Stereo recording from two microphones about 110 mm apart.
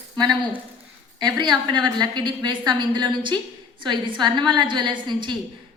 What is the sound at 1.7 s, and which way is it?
A woman's voice, 45° right (ahead or behind).